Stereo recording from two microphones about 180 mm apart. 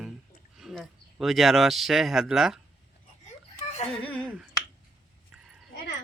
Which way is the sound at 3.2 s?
40° left (ahead or behind).